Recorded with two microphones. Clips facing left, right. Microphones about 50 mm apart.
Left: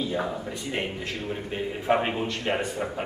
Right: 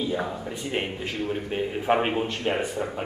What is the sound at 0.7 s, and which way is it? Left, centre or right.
A man's voice, centre.